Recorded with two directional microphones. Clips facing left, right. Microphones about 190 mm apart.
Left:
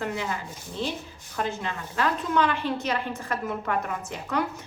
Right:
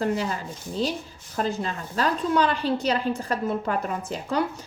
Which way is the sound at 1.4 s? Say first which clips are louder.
Right 3 dB; 35° right (ahead or behind).